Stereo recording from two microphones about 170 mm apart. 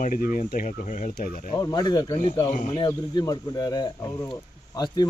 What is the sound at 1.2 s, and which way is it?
Speech, 60° left (ahead or behind).